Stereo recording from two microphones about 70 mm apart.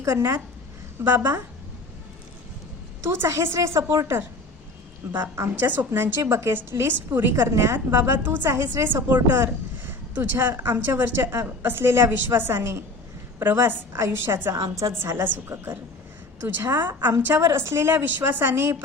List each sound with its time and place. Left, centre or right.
0.0 s a woman's voice: right
3.1 s speech: right
3.8 s a woman's voice: right
5.5 s speech: right
8.4 s speech: right